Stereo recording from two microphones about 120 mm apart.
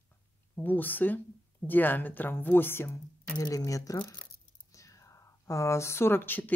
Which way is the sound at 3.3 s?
30° left (ahead or behind).